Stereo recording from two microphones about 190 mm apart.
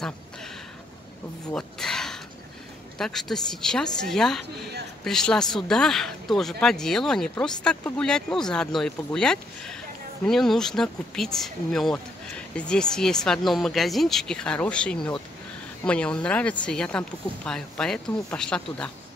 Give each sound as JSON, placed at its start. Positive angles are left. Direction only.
{"t": 1.5, "sound": "speech", "side_deg": 5}